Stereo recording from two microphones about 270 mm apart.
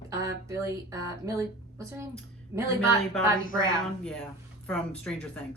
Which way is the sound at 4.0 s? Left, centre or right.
Centre.